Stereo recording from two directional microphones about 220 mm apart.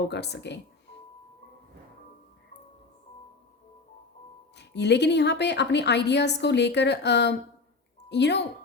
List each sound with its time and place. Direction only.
0.1 s a woman's voice: 50° left (ahead or behind)
4.5 s a woman's voice: 50° left (ahead or behind)